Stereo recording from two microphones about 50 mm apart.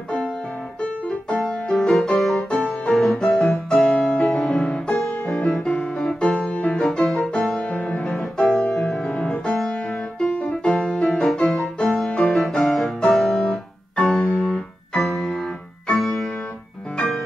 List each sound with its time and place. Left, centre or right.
0.8 s music: left
1.4 s music: centre
3.4 s piano: centre
4.0 s music: centre
7.6 s music: left
8.2 s music: centre
10.8 s music: left
11.2 s music: centre
12.2 s piano: centre
15.0 s music: centre